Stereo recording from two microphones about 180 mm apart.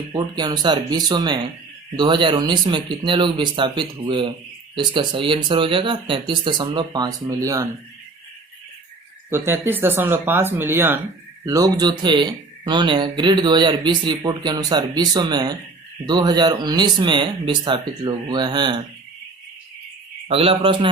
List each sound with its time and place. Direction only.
0.1 s speech: 20° right (ahead or behind)
9.3 s speech: 10° right (ahead or behind)
20.2 s a man's voice: 30° right (ahead or behind)